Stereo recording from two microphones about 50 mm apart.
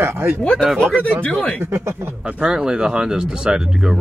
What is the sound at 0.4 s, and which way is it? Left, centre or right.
Speech, centre.